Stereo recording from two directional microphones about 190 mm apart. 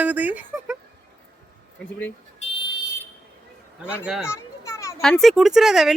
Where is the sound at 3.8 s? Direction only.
5° right (ahead or behind).